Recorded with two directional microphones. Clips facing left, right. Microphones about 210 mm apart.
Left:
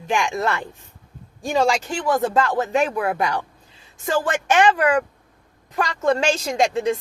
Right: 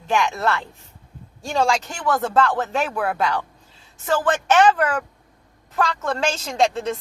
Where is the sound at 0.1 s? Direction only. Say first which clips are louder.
Right 1 dB; 15° left (ahead or behind).